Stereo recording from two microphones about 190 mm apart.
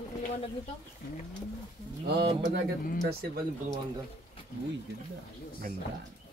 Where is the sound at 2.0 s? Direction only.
60° right (ahead or behind).